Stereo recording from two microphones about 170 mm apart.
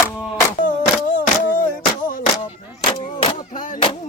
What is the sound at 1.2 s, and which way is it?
Music, 55° left (ahead or behind).